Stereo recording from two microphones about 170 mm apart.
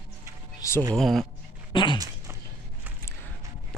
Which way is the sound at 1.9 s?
20° right (ahead or behind).